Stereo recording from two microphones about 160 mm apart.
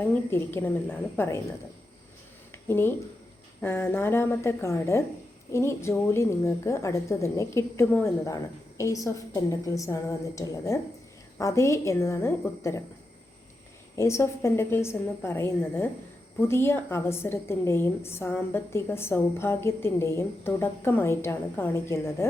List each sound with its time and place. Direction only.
0.0 s a woman's voice: 15° left (ahead or behind)
2.6 s a woman's voice: 15° left (ahead or behind)
13.9 s a woman's voice: 15° left (ahead or behind)